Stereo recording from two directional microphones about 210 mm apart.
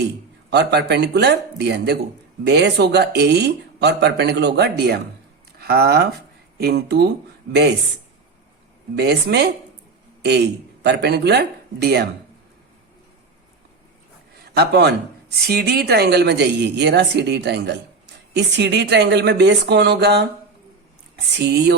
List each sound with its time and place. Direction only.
0.5 s speech: 50° right (ahead or behind)
9.0 s speech: 50° right (ahead or behind)
10.8 s speech: 55° right (ahead or behind)
14.5 s speech: 50° right (ahead or behind)
21.3 s a sound: 55° right (ahead or behind)